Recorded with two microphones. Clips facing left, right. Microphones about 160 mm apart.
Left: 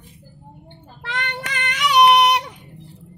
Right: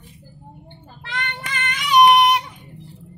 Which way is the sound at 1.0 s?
75° left (ahead or behind).